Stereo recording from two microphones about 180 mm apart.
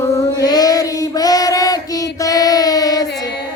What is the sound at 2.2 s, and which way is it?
Child singing, 20° left (ahead or behind).